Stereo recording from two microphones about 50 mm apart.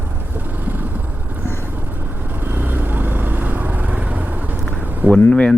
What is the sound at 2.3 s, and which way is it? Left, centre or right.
Vehicle, right.